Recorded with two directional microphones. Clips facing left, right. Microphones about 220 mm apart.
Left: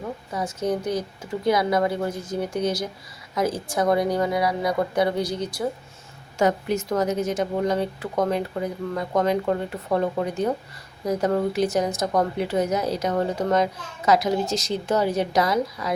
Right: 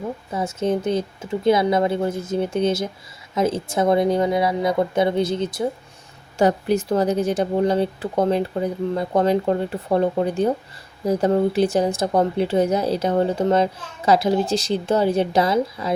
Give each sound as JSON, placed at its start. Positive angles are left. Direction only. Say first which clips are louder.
{"t": 0.3, "sound": "a woman's voice", "louder": "right 3 dB", "side_deg": -25}